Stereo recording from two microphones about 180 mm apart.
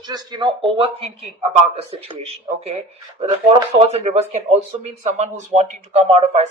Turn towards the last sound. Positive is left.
turn(degrees=-35)  # may be behind; listen again after turning